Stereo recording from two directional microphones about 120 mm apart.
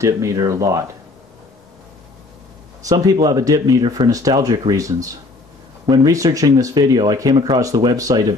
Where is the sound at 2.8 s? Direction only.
30° right (ahead or behind).